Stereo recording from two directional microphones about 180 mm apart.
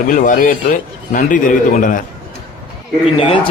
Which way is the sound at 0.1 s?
45° left (ahead or behind).